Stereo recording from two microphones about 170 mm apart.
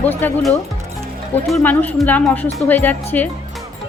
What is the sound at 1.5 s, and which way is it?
A woman's voice, 10° left (ahead or behind).